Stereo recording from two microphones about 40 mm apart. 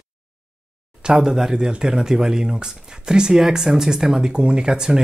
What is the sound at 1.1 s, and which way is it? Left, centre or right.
Speech, centre.